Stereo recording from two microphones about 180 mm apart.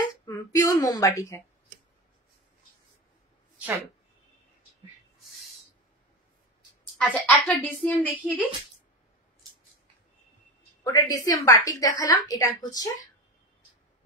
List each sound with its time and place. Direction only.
0.2 s speech: 20° left (ahead or behind)
3.5 s a sound: 10° right (ahead or behind)
7.0 s a woman's voice: 10° left (ahead or behind)
10.8 s a woman's voice: 20° left (ahead or behind)